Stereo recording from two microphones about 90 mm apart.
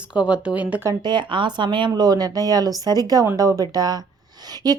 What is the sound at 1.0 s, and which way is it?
A woman's voice, 55° right (ahead or behind).